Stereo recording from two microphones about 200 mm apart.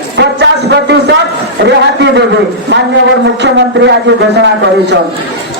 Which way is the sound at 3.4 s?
60° right (ahead or behind).